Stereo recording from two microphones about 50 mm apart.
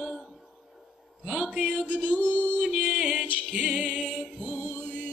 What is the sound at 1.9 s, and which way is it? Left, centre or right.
Music, left.